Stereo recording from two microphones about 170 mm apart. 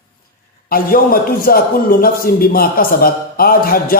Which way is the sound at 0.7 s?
60° left (ahead or behind).